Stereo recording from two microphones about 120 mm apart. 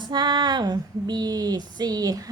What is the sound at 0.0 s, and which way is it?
Speech, 35° right (ahead or behind).